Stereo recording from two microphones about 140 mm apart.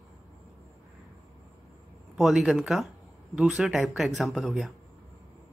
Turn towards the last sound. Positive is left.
turn(degrees=0)  # may be behind; listen again after turning